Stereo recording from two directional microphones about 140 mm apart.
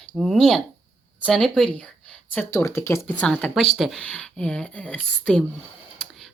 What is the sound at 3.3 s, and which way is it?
Speech, 5° left (ahead or behind).